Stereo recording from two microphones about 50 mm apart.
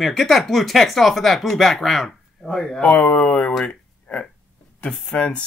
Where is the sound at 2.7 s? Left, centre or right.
Left.